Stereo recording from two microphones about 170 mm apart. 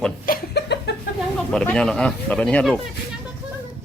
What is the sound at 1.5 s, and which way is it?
Speech, 5° left (ahead or behind).